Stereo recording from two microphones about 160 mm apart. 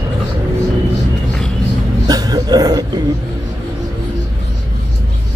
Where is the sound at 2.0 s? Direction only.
25° right (ahead or behind).